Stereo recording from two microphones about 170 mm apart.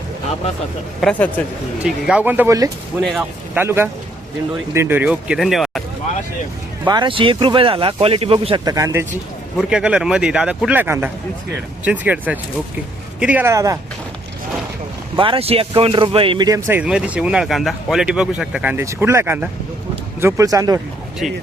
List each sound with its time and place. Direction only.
1.0 s speech: centre (ahead or behind)
3.0 s speech: centre (ahead or behind)
3.6 s speech: 15° right (ahead or behind)
6.8 s speech: 25° right (ahead or behind)
9.6 s speech: 5° right (ahead or behind)
15.1 s speech: 30° right (ahead or behind)